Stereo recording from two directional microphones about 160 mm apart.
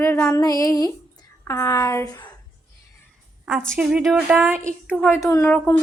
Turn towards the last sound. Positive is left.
turn(degrees=10)  # may be behind; listen again after turning